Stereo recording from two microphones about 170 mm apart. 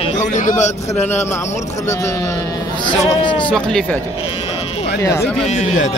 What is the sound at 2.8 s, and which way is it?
Speech, 30° left (ahead or behind).